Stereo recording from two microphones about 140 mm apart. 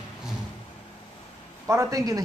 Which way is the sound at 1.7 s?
25° right (ahead or behind).